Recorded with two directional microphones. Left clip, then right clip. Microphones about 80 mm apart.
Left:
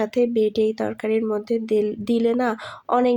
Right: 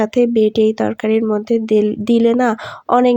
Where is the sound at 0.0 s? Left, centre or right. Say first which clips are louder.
Right 6 dB; right.